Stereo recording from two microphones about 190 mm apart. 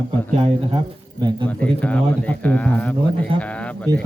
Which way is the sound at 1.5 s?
5° left (ahead or behind).